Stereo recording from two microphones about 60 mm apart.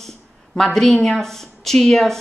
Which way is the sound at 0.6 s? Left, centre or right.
Centre.